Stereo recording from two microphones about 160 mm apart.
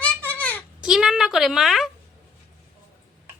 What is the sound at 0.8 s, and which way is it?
A woman's voice, 5° right (ahead or behind).